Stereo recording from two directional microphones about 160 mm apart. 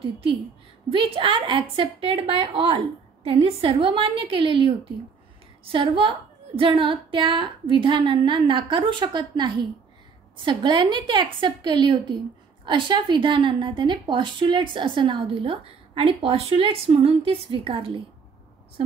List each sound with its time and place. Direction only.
0.0 s a woman's voice: 35° right (ahead or behind)